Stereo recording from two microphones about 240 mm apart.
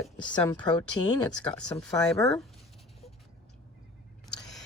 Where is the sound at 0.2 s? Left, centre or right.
Centre.